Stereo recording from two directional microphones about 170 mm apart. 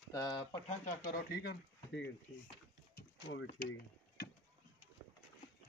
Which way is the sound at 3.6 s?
75° left (ahead or behind).